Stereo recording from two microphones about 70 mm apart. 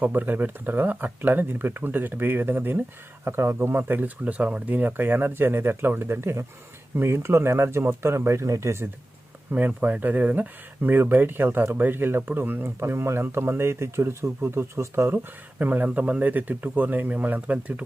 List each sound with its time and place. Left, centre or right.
0.0 s speech: right
9.5 s speech: right